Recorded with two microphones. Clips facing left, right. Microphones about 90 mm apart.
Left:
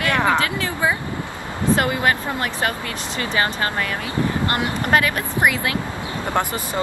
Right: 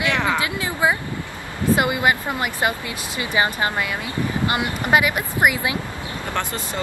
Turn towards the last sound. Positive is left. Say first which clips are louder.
# left 4 dB
turn(degrees=15)  # may be behind; listen again after turning